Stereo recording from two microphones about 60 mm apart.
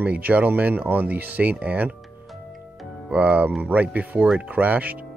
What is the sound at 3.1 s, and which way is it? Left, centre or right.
Speech, centre.